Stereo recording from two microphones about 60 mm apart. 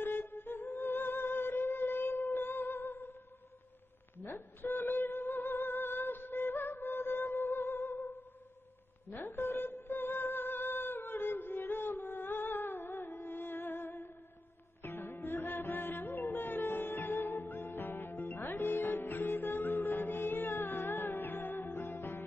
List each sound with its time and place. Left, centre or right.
0.0 s music: left
4.6 s music: left